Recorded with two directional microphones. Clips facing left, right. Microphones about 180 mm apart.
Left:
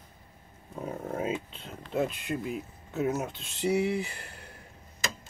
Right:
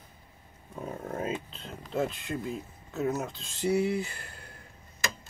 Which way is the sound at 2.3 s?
15° left (ahead or behind).